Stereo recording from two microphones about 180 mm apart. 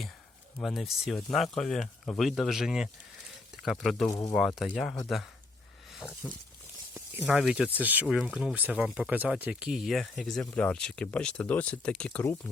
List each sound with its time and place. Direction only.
0.6 s speech: centre (ahead or behind)
4.1 s speech: 20° left (ahead or behind)
4.4 s speech: centre (ahead or behind)
6.9 s speech: 5° right (ahead or behind)